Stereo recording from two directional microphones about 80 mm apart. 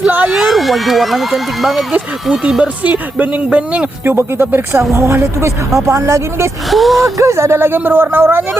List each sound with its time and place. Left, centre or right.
0.3 s speech: centre
2.8 s speech: right
4.0 s speech: right
6.7 s speech: centre
7.2 s speech: right